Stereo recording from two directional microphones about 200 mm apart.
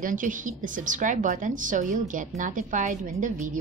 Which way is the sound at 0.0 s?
40° right (ahead or behind).